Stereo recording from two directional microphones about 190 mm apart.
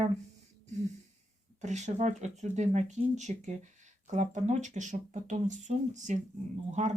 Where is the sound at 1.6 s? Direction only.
40° right (ahead or behind).